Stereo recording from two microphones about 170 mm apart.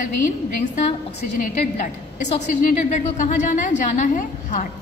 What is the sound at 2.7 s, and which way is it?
A woman's voice, 45° left (ahead or behind).